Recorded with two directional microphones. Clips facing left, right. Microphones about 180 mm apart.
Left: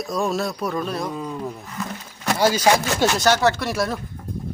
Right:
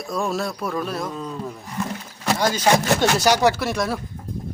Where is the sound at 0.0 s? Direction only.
Centre (ahead or behind).